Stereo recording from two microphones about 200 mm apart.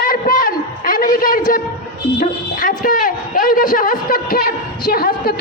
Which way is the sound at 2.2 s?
45° left (ahead or behind).